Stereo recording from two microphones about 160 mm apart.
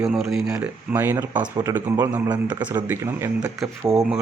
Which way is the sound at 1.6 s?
20° right (ahead or behind).